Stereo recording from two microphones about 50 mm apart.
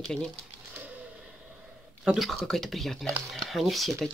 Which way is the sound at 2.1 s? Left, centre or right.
Centre.